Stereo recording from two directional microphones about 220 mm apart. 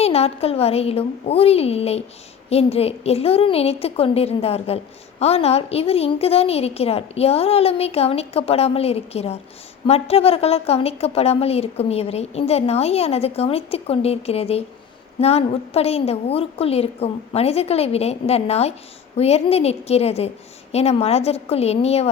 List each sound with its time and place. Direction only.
0.0 s a woman's voice: 25° left (ahead or behind)